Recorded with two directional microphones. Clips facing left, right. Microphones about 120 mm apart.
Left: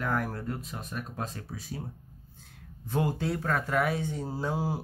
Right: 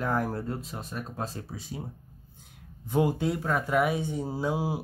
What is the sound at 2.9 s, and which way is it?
A man's voice, 15° right (ahead or behind).